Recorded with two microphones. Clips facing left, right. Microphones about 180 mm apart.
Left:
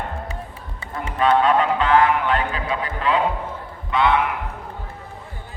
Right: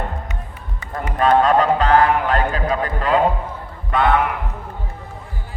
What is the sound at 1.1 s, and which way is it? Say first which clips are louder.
Music: right 2 dB; 45° right (ahead or behind).